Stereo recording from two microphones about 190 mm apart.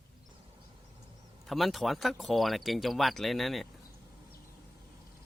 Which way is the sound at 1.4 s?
Centre (ahead or behind).